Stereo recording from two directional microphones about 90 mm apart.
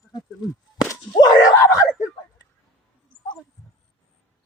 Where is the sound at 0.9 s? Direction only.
45° left (ahead or behind).